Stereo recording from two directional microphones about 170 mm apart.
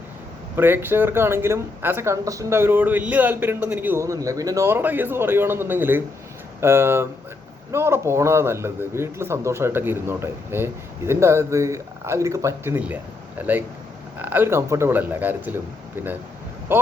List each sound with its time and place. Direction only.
0.5 s speech: 10° right (ahead or behind)
14.2 s speech: 10° right (ahead or behind)